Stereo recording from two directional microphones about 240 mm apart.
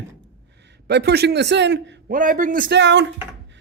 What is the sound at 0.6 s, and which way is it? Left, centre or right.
A man's voice, right.